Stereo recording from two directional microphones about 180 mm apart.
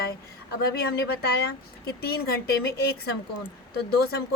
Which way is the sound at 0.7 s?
60° left (ahead or behind).